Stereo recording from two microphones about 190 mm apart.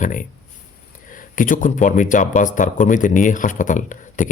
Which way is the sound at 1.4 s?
45° left (ahead or behind).